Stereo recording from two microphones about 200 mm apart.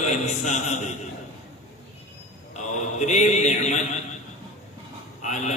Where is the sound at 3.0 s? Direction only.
35° left (ahead or behind).